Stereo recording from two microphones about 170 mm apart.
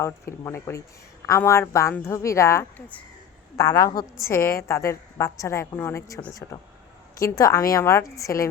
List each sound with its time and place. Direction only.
0.0 s a woman's voice: 15° left (ahead or behind)